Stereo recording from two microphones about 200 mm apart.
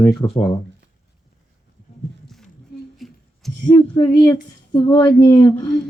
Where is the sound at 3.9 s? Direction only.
20° left (ahead or behind).